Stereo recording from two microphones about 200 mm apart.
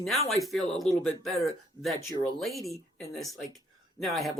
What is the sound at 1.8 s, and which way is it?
Speech, 25° left (ahead or behind).